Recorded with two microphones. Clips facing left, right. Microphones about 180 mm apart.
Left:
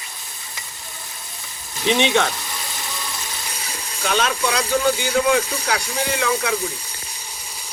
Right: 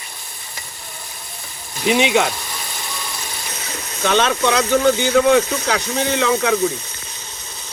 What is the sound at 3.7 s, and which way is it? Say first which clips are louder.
Speech: right 5 dB; 30° right (ahead or behind).